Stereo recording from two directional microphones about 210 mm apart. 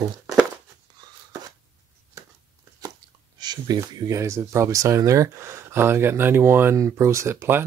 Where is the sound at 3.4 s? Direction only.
20° right (ahead or behind).